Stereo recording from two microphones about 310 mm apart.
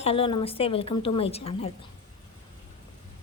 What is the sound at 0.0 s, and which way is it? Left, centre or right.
A woman's voice, centre.